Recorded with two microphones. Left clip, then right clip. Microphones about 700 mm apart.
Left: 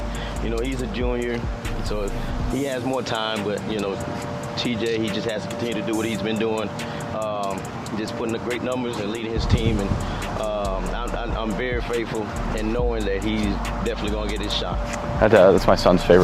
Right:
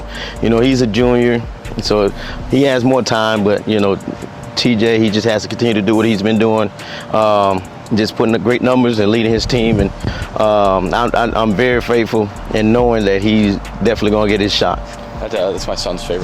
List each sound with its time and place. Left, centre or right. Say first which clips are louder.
0.4 s speech: right 16 dB; right
2.6 s speech: right 13 dB; right
4.5 s speech: right 12 dB; right
7.2 s speech: right 16 dB; right
7.9 s speech: right 13 dB; right
11.4 s speech: right 12 dB; right
15.3 s speech: left 3 dB; left